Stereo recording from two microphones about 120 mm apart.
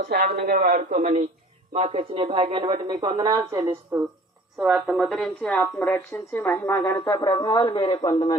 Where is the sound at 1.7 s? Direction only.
70° right (ahead or behind); by 2.9 s 45° right (ahead or behind).